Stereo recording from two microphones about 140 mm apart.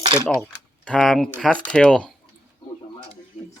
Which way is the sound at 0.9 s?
5° left (ahead or behind).